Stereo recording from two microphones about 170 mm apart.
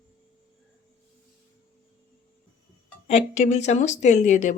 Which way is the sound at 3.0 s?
40° left (ahead or behind).